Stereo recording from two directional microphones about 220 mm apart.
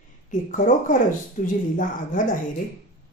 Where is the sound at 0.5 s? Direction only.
35° left (ahead or behind).